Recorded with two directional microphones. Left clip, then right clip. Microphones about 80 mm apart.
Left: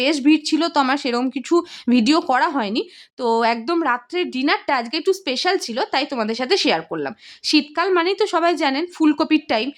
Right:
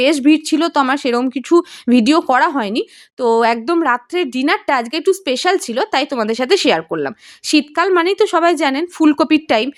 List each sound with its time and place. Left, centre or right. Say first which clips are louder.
0.0 s speech: right 4 dB; right